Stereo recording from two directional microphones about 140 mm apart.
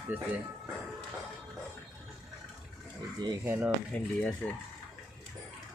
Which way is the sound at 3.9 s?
10° left (ahead or behind).